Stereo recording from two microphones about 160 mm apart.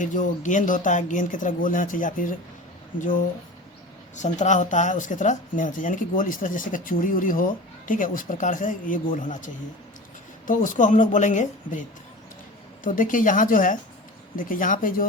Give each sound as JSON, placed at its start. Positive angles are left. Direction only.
{"t": 0.0, "sound": "speech", "side_deg": 50}
{"t": 12.8, "sound": "speech", "side_deg": 55}